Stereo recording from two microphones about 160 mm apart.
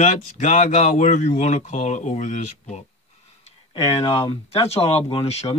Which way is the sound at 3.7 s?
35° left (ahead or behind).